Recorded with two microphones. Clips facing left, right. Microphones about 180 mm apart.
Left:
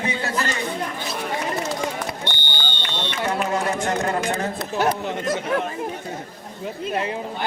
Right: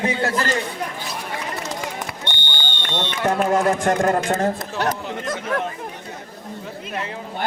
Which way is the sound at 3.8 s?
45° right (ahead or behind).